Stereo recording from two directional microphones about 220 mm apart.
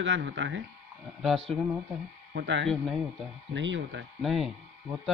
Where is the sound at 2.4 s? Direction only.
55° right (ahead or behind).